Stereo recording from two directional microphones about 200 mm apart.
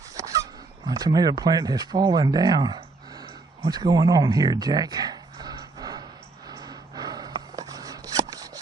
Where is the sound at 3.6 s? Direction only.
20° right (ahead or behind).